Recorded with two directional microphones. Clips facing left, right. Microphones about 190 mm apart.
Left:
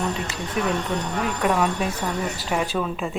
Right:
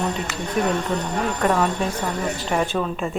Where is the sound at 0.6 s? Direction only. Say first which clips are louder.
Right 3 dB; 45° right (ahead or behind).